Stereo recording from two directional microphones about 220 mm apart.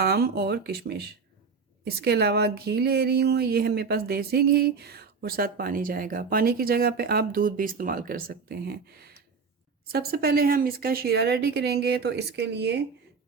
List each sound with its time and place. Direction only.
0.0 s speech: 45° right (ahead or behind)